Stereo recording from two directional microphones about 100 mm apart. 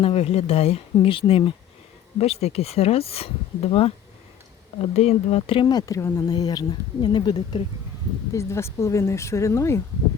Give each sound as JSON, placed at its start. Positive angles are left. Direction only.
{"t": 0.0, "sound": "speech", "side_deg": 90}
{"t": 1.0, "sound": "speech", "side_deg": 65}
{"t": 2.1, "sound": "speech", "side_deg": 90}
{"t": 3.7, "sound": "speech", "side_deg": 70}
{"t": 4.8, "sound": "speech", "side_deg": 90}
{"t": 5.6, "sound": "speech", "side_deg": 40}
{"t": 8.3, "sound": "speech", "side_deg": 30}